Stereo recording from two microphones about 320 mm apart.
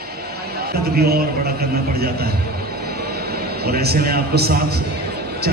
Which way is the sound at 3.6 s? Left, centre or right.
Right.